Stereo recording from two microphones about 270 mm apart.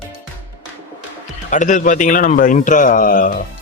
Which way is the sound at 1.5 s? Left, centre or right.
Left.